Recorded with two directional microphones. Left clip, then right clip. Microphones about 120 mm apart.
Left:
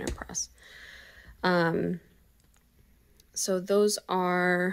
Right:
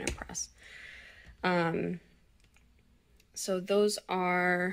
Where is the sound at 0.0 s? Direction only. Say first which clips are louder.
Left 2 dB; 25° left (ahead or behind); by 2.0 s 40° left (ahead or behind).